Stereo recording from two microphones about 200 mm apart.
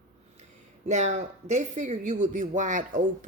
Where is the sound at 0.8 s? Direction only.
35° right (ahead or behind).